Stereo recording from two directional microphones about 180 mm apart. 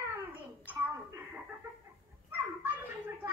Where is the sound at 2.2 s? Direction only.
10° right (ahead or behind).